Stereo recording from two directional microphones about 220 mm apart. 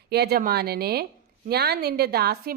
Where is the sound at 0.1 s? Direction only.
45° right (ahead or behind).